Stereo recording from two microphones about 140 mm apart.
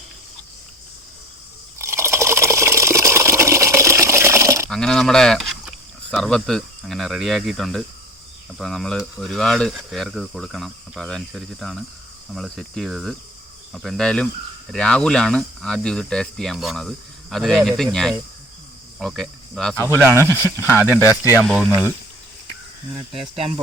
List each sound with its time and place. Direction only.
1.8 s water: 20° right (ahead or behind)
4.7 s speech: 5° left (ahead or behind)
18.9 s speech: centre (ahead or behind)
19.7 s speech: 20° left (ahead or behind)
20.0 s speech: 15° right (ahead or behind)
20.6 s speech: 20° left (ahead or behind)
21.0 s speech: 15° right (ahead or behind)
21.4 s speech: centre (ahead or behind)